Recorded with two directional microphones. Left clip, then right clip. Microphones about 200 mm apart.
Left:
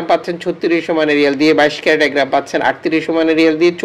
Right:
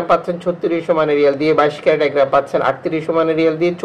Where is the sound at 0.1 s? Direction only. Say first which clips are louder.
Left 1 dB; 25° left (ahead or behind).